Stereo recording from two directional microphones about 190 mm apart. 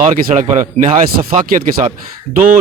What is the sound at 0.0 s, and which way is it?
Speech, 40° right (ahead or behind).